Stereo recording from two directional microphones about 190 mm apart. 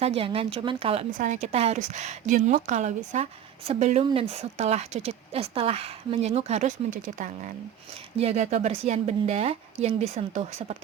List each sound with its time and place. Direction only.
0.2 s speech: 30° right (ahead or behind)
1.1 s speech: 40° right (ahead or behind)